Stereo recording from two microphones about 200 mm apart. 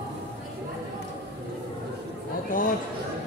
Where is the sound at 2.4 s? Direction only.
45° left (ahead or behind).